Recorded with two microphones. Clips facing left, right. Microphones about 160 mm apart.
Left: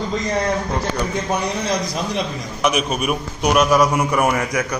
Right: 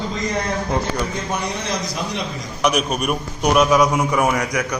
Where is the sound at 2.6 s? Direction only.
Centre (ahead or behind).